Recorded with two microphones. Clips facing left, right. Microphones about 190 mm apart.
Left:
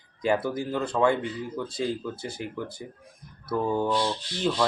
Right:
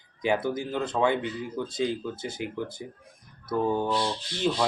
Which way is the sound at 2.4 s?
20° right (ahead or behind).